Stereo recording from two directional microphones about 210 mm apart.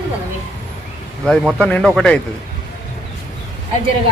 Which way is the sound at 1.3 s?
Centre (ahead or behind).